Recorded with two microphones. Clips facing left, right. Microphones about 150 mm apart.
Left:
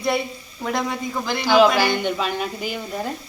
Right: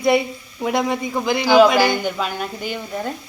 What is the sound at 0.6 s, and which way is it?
Speech, 10° right (ahead or behind).